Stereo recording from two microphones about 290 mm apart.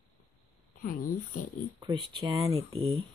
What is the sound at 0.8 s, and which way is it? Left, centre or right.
Speech, left.